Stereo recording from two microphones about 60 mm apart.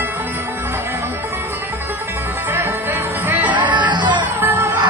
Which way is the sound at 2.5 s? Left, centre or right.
Right.